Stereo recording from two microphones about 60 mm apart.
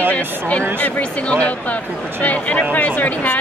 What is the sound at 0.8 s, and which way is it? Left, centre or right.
Speech, left.